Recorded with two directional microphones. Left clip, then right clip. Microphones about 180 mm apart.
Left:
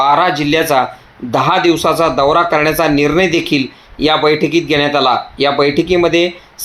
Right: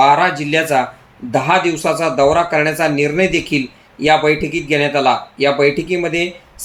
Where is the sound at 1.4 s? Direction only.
20° left (ahead or behind).